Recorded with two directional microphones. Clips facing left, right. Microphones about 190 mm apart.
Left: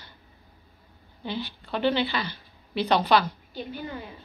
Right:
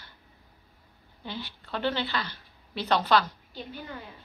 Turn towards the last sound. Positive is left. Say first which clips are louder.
# left 5 dB
turn(degrees=10)  # may be behind; listen again after turning